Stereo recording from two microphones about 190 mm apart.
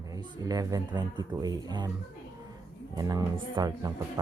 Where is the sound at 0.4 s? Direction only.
20° right (ahead or behind).